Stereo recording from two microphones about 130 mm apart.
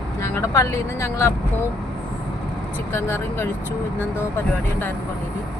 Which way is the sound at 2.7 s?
20° left (ahead or behind).